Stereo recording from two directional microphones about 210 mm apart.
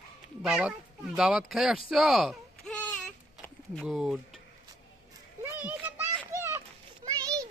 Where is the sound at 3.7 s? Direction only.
Centre (ahead or behind).